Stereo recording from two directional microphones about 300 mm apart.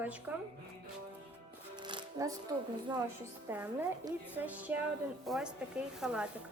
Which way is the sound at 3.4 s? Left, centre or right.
Centre.